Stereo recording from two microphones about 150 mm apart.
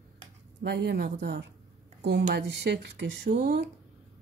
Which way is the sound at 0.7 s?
90° right.